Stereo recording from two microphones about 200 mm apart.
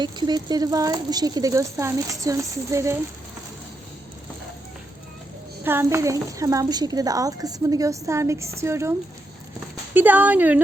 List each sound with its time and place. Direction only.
0.0 s a woman's voice: 20° right (ahead or behind)
5.6 s a woman's voice: 10° right (ahead or behind)